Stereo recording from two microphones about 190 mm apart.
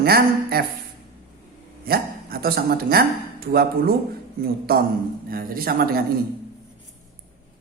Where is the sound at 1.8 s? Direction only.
50° right (ahead or behind).